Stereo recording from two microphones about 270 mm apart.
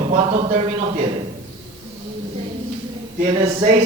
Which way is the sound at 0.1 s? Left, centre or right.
Right.